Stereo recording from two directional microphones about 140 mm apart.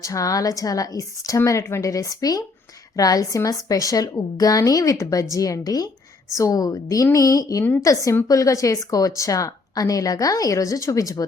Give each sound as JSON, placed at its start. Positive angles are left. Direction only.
{"t": 0.0, "sound": "speech", "side_deg": 25}